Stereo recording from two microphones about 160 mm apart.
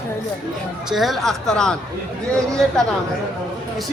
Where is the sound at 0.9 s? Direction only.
Centre (ahead or behind).